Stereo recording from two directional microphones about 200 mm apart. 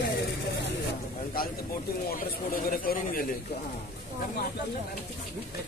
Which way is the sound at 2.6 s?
45° left (ahead or behind).